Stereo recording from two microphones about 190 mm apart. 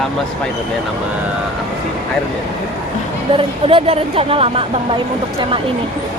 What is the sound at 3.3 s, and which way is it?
Speech, 30° right (ahead or behind).